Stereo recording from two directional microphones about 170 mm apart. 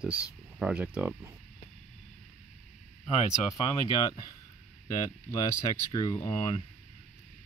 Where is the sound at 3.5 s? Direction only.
20° left (ahead or behind).